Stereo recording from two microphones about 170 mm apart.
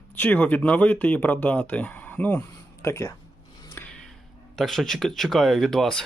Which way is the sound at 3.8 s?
5° left (ahead or behind).